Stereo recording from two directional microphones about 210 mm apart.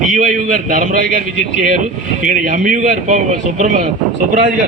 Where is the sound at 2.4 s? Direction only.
40° right (ahead or behind).